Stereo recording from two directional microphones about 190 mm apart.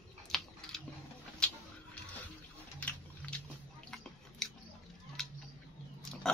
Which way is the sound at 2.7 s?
5° left (ahead or behind).